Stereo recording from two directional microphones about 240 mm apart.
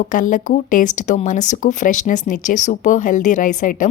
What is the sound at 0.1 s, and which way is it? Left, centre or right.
Speech, left.